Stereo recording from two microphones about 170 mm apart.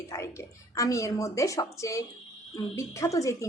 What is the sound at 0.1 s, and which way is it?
A woman's voice, 15° left (ahead or behind).